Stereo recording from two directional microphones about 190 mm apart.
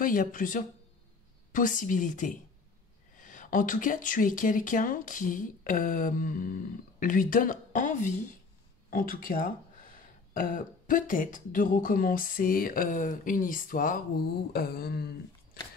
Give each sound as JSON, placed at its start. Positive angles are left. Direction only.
{"t": 0.0, "sound": "speech", "side_deg": 45}